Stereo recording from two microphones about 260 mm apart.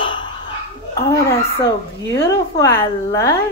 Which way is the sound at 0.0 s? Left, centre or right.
Centre.